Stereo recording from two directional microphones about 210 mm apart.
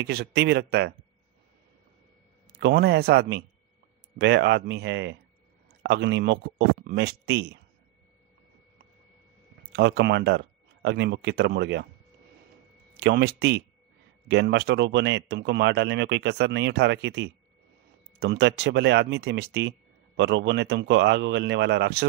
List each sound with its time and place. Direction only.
0.0 s speech: 50° right (ahead or behind)
2.5 s speech: 50° right (ahead or behind)
6.8 s speech: 45° right (ahead or behind)
9.7 s speech: 55° right (ahead or behind)
13.0 s speech: 50° right (ahead or behind)